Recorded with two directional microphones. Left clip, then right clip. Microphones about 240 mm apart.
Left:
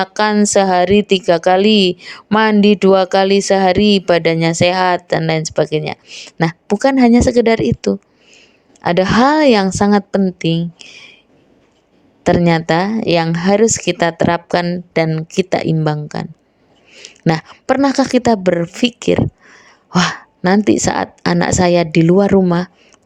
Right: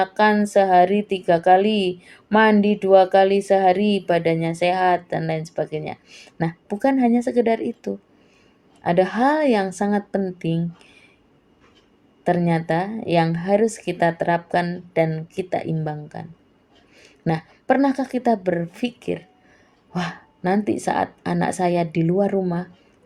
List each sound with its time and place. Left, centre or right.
0.0 s a woman's voice: left
12.2 s a woman's voice: left